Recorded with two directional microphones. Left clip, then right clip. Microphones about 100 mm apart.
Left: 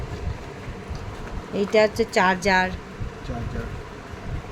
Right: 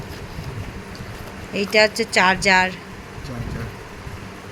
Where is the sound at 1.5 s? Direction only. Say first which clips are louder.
Right 2 dB; 20° left (ahead or behind).